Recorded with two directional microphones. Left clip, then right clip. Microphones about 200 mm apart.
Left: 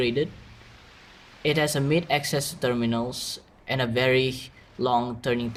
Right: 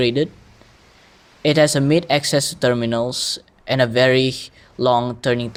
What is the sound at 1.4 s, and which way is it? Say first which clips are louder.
Speech: right 9 dB; 35° right (ahead or behind).